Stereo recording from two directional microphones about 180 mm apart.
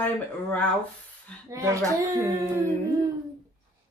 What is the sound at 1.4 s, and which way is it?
Speech, 15° right (ahead or behind).